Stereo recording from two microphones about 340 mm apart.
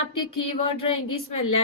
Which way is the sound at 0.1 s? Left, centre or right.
Left.